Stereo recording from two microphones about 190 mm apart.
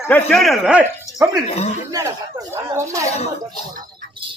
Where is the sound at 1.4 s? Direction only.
35° left (ahead or behind).